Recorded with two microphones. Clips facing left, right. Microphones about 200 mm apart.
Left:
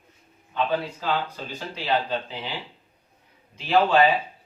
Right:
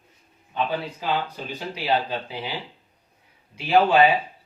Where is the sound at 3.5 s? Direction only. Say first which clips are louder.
Right 2 dB; 10° right (ahead or behind).